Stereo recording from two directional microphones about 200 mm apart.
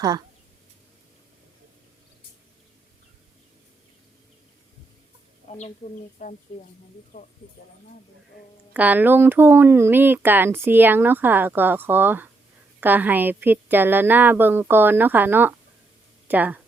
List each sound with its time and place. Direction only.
5.5 s speech: 30° left (ahead or behind)
7.1 s speech: 50° left (ahead or behind)
8.7 s speech: 10° right (ahead or behind)
16.2 s a sound: 10° right (ahead or behind)